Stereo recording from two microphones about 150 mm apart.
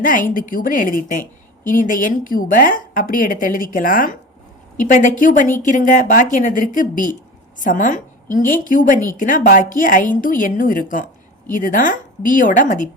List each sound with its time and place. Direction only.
0.0 s a woman's voice: 65° left (ahead or behind)